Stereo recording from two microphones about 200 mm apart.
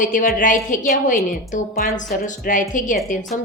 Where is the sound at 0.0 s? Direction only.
40° left (ahead or behind).